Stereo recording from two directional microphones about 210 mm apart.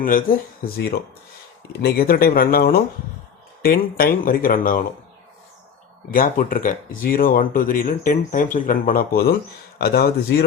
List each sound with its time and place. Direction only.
0.0 s speech: 40° left (ahead or behind)
6.1 s speech: 45° left (ahead or behind)